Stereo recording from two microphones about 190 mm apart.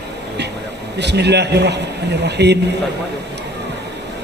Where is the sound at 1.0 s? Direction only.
65° right (ahead or behind).